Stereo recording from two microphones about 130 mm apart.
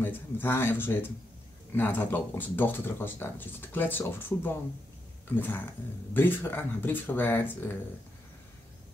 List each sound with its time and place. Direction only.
0.0 s speech: 15° left (ahead or behind)